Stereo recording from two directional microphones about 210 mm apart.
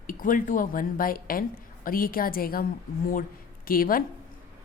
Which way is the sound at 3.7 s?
45° left (ahead or behind).